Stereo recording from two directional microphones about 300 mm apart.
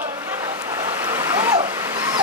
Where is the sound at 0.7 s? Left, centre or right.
Centre.